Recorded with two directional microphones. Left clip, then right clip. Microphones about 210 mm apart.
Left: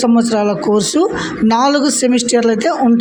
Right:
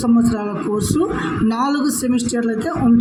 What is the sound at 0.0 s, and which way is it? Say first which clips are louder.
Speech: left 5 dB; 40° left (ahead or behind).